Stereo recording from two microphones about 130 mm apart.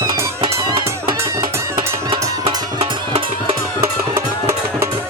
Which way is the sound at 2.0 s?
40° right (ahead or behind).